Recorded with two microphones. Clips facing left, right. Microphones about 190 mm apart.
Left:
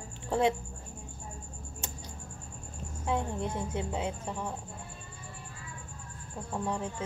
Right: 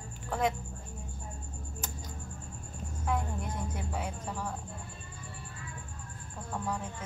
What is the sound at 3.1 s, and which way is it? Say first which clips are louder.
A woman's voice: left 3 dB; 25° left (ahead or behind).